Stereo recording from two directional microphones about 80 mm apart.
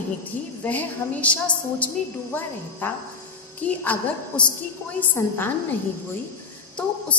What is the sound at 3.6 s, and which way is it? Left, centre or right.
A woman's voice, left.